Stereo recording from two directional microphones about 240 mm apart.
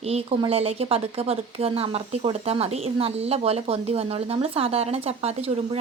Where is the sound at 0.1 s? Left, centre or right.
Right.